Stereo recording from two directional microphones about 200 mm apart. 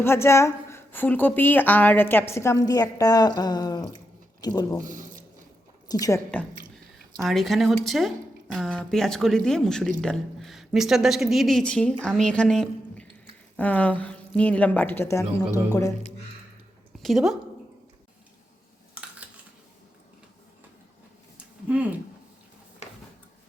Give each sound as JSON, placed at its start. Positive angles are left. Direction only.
{"t": 0.0, "sound": "a woman's voice", "side_deg": 15}
{"t": 4.8, "sound": "squish", "side_deg": -40}
{"t": 5.9, "sound": "a woman's voice", "side_deg": 15}
{"t": 7.2, "sound": "a woman's voice", "side_deg": 0}
{"t": 17.0, "sound": "speech", "side_deg": 0}
{"t": 21.3, "sound": "a sound", "side_deg": -5}